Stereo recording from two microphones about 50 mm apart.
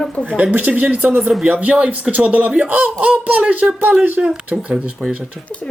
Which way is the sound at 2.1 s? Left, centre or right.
Right.